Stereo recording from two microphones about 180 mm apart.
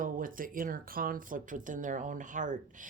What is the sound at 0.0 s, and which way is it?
Speech, 50° right (ahead or behind).